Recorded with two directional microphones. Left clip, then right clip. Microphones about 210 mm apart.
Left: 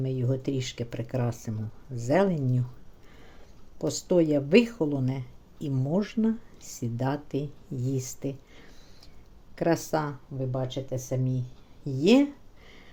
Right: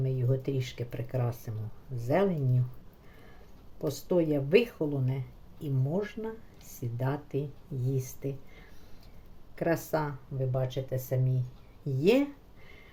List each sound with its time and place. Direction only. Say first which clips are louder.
0.0 s speech: left 2 dB; 35° left (ahead or behind)
3.8 s speech: left 4 dB; 40° left (ahead or behind)